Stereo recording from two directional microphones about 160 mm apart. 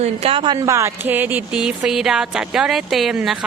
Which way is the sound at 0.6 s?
20° right (ahead or behind).